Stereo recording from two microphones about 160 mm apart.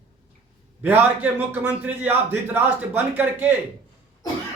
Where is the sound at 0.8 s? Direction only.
10° right (ahead or behind).